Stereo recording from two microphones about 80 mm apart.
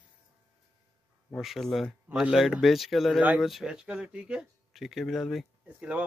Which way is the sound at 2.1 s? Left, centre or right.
Centre.